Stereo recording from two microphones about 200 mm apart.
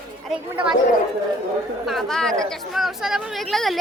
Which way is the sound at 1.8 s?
Centre (ahead or behind).